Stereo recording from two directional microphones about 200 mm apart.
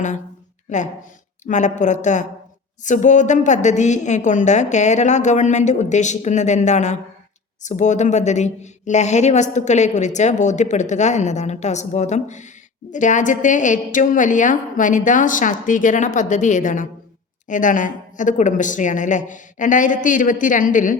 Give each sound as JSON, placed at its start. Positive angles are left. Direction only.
{"t": 1.5, "sound": "speech", "side_deg": 35}